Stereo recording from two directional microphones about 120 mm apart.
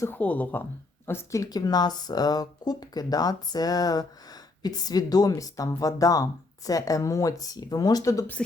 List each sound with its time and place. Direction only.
0.0 s speech: 15° left (ahead or behind)
8.4 s speech: 5° left (ahead or behind)